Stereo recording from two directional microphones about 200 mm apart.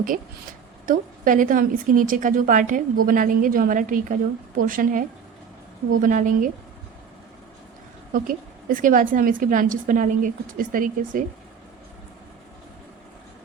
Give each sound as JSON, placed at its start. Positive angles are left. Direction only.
{"t": 0.9, "sound": "a woman's voice", "side_deg": -45}
{"t": 8.1, "sound": "a woman's voice", "side_deg": -45}